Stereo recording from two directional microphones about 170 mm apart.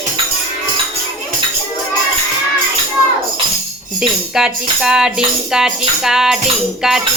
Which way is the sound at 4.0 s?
5° right (ahead or behind).